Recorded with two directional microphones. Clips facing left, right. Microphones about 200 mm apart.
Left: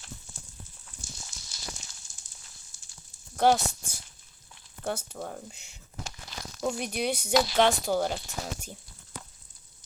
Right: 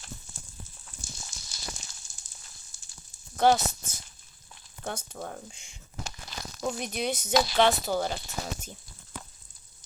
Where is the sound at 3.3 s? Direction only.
5° left (ahead or behind).